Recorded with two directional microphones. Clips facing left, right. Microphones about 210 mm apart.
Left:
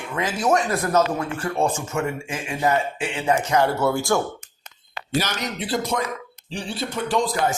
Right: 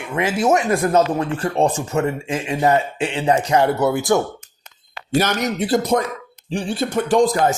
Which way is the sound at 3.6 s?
20° right (ahead or behind).